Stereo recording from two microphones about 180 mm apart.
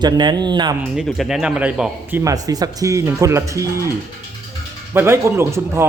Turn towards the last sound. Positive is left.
turn(degrees=-15)  # may be behind; listen again after turning